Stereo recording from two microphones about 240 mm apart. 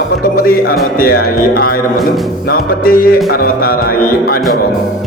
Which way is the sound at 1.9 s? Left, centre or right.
Centre.